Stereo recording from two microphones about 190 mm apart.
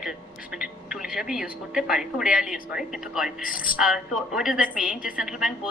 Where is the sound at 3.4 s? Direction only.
50° left (ahead or behind).